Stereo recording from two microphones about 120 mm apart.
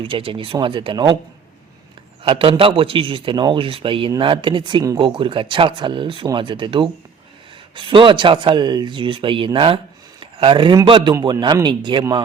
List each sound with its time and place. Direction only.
0.0 s speech: 50° right (ahead or behind)
2.2 s speech: 45° right (ahead or behind)